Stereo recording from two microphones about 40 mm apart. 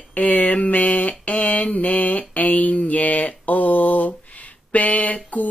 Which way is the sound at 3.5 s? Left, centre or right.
Left.